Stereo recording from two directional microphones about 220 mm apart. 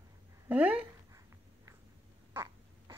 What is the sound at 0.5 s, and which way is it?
Speech, 5° right (ahead or behind).